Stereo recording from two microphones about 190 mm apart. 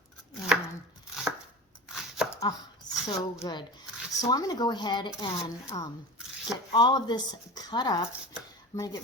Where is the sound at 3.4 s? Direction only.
20° left (ahead or behind).